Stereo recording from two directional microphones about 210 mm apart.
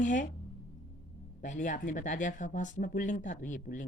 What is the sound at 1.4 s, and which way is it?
Speech, 35° left (ahead or behind).